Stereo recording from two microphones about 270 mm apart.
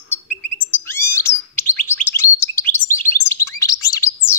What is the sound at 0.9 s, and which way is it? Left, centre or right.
Bird, centre.